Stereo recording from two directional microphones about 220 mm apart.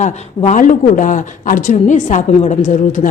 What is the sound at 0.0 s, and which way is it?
Speech, 35° left (ahead or behind).